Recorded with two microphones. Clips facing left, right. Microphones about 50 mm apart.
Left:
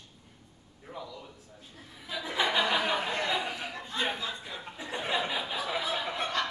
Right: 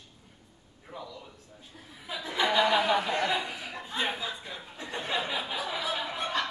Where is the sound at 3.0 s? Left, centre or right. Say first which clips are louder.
Right 2 dB; centre.